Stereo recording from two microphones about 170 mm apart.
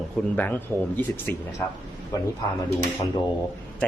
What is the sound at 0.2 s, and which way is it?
A man's voice, 5° left (ahead or behind).